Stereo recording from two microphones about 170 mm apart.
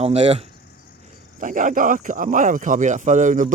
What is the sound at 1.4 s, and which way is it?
Speech, 50° right (ahead or behind).